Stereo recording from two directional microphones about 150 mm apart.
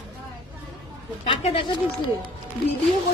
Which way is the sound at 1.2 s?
40° left (ahead or behind).